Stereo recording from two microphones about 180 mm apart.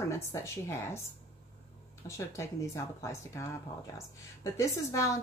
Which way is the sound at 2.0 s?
15° left (ahead or behind).